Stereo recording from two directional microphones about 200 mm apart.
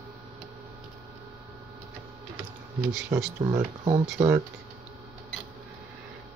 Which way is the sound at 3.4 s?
20° right (ahead or behind).